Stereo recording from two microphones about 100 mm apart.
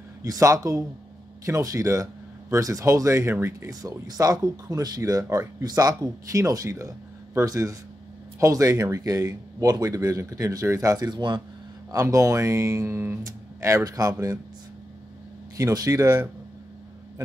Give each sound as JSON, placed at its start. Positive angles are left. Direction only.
{"t": 0.2, "sound": "speech", "side_deg": -35}
{"t": 11.9, "sound": "speech", "side_deg": -35}
{"t": 15.5, "sound": "speech", "side_deg": -35}